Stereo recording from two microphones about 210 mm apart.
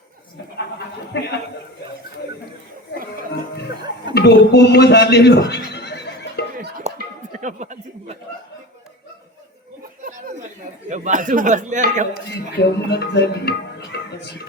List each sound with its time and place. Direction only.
1.1 s a man's voice: 55° left (ahead or behind)
4.1 s speech: 50° left (ahead or behind)
6.8 s a sound: 30° right (ahead or behind)
10.8 s speech: 35° right (ahead or behind)
12.5 s speech: 50° left (ahead or behind)